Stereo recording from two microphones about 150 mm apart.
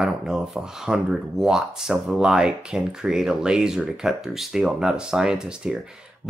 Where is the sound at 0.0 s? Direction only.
5° right (ahead or behind).